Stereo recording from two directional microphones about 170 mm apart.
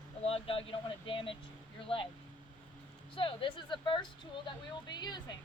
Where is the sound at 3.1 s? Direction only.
30° left (ahead or behind).